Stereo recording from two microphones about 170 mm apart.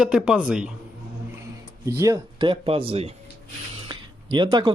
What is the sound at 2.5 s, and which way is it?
Speech, 30° right (ahead or behind).